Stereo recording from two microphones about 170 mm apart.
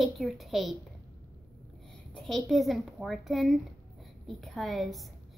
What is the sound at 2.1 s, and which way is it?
A child's voice, centre (ahead or behind).